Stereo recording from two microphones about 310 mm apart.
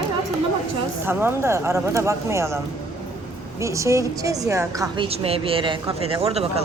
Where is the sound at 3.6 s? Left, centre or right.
Centre.